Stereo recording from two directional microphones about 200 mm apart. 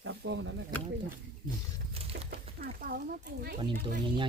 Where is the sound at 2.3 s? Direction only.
50° right (ahead or behind).